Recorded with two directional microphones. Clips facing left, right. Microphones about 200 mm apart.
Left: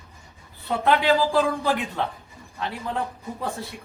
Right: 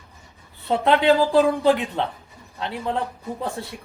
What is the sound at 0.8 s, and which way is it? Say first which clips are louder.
Speech: right 3 dB; 25° right (ahead or behind).